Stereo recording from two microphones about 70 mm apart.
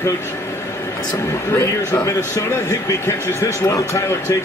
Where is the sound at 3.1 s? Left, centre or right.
Left.